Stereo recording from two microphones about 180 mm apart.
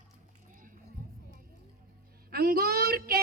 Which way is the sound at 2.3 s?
55° right (ahead or behind).